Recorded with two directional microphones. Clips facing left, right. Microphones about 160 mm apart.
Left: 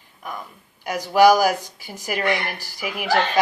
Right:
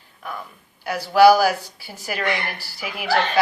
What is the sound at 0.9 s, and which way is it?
Speech, 15° left (ahead or behind).